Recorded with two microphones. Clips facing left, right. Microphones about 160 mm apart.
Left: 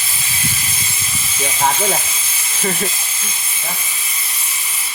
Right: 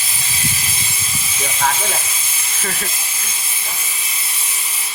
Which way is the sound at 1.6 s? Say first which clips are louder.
Left 3 dB; 25° left (ahead or behind).